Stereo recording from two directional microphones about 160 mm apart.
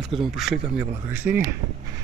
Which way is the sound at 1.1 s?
10° right (ahead or behind).